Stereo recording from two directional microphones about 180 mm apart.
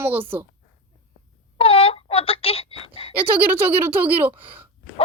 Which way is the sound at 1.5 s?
30° left (ahead or behind).